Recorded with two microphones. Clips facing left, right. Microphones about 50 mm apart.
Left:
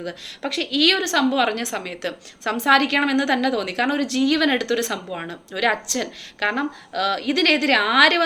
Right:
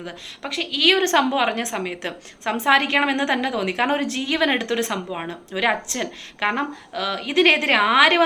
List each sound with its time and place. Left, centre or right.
0.4 s a woman's voice: centre
0.9 s a woman's voice: right
1.4 s a woman's voice: centre